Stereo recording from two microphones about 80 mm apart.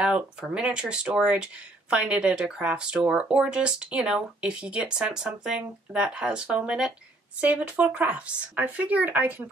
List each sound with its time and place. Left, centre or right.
0.4 s speech: centre